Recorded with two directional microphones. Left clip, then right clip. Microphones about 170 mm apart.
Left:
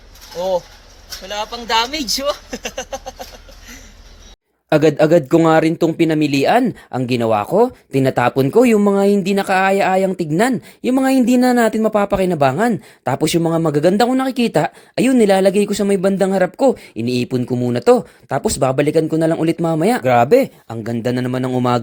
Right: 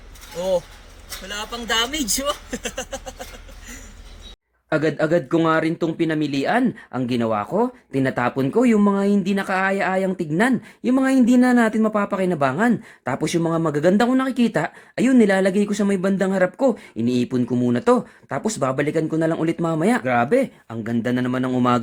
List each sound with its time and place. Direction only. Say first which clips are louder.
1.2 s speech: left 5 dB; 35° right (ahead or behind)
2.9 s a sound: left 5 dB; 35° right (ahead or behind)
4.7 s speech: left 7 dB; 30° left (ahead or behind); by 21.8 s 15° left (ahead or behind)